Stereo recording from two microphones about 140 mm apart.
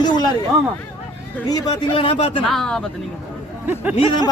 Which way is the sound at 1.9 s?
40° left (ahead or behind).